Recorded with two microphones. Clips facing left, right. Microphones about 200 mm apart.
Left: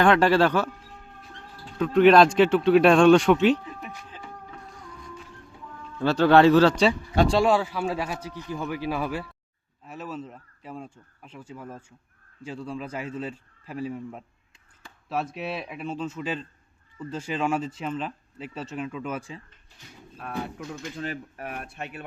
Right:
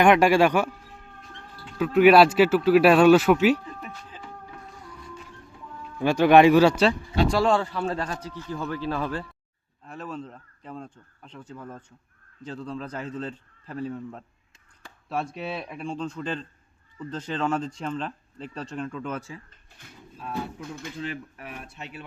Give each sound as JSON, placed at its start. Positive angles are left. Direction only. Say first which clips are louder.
{"t": 0.0, "sound": "speech", "louder": "right 1 dB", "side_deg": -15}
{"t": 1.8, "sound": "speech", "louder": "even", "side_deg": -5}
{"t": 3.7, "sound": "a sound", "louder": "even", "side_deg": 0}
{"t": 4.1, "sound": "music", "louder": "even", "side_deg": -5}
{"t": 6.0, "sound": "speech", "louder": "right 1 dB", "side_deg": -15}
{"t": 7.4, "sound": "speech", "louder": "left 1 dB", "side_deg": 5}
{"t": 20.1, "sound": "a man's voice", "louder": "even", "side_deg": 60}
{"t": 20.8, "sound": "speech", "louder": "even", "side_deg": 40}
{"t": 21.5, "sound": "a man's voice", "louder": "left 2 dB", "side_deg": 60}